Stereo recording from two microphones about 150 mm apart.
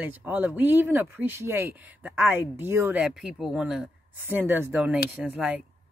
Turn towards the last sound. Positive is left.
turn(degrees=-10)  # may be behind; listen again after turning